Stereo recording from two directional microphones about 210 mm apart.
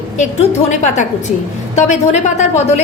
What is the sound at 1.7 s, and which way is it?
A woman's voice, 35° left (ahead or behind).